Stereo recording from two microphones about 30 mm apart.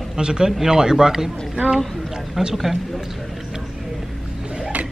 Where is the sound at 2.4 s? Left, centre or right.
Centre.